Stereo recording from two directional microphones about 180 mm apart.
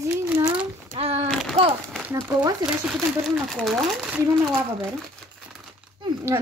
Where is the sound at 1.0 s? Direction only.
35° right (ahead or behind).